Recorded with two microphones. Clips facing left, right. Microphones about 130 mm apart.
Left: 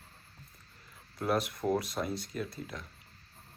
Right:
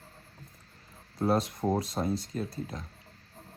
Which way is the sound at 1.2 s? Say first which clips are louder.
Right 4 dB; 30° right (ahead or behind).